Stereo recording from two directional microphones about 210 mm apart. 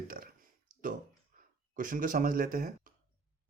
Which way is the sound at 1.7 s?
40° right (ahead or behind).